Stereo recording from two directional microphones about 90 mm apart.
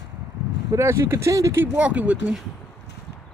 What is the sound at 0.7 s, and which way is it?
Speech, 30° right (ahead or behind).